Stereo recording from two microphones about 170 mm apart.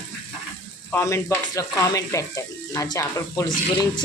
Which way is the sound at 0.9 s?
15° left (ahead or behind).